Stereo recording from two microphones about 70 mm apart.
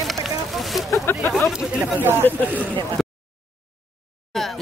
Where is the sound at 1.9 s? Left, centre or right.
Right.